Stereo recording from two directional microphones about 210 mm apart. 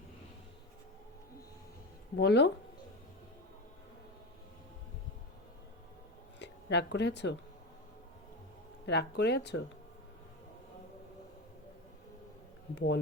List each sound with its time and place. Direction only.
2.1 s speech: 50° left (ahead or behind)
6.4 s speech: 55° left (ahead or behind)
8.9 s speech: 55° left (ahead or behind)
12.7 s speech: 50° left (ahead or behind)